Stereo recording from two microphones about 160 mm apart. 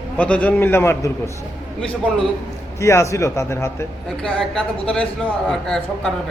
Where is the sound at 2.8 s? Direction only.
20° left (ahead or behind).